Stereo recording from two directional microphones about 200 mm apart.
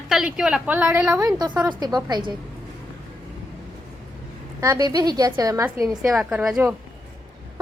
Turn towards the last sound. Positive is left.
turn(degrees=-5)  # may be behind; listen again after turning